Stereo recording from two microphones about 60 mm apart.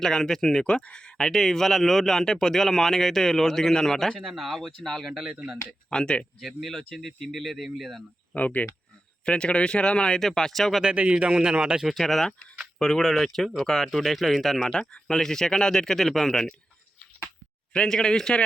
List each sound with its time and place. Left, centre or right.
0.0 s speech: centre
5.9 s speech: centre
6.4 s speech: centre
8.3 s speech: left; by 10.8 s centre
10.8 s speech: centre
11.9 s speech: centre
17.7 s speech: centre